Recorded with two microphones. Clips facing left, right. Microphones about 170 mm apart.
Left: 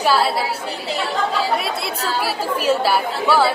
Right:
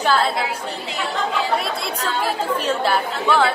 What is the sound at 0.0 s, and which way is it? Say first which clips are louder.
Speech: left 1 dB; 10° left (ahead or behind).